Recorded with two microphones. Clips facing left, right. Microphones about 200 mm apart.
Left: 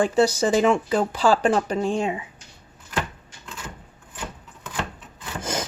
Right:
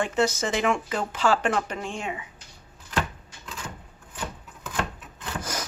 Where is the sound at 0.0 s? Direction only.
30° left (ahead or behind).